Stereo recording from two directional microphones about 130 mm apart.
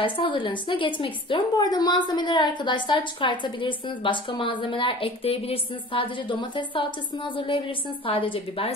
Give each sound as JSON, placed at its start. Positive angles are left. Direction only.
{"t": 0.0, "sound": "a woman's voice", "side_deg": 40}